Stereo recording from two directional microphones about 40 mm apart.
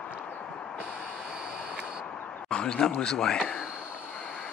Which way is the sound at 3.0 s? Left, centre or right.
Centre.